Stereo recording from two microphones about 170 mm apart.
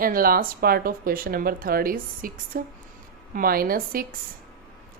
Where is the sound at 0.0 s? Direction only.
60° right (ahead or behind).